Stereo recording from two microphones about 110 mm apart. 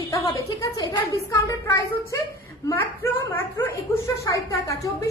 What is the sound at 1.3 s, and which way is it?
Speech, 30° left (ahead or behind).